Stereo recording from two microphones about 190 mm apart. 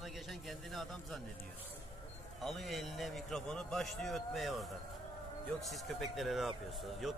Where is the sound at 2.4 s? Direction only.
Centre (ahead or behind).